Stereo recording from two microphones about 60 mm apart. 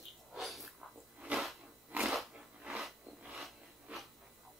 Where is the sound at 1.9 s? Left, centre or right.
Right.